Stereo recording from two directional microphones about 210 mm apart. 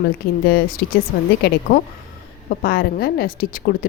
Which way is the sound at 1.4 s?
45° left (ahead or behind).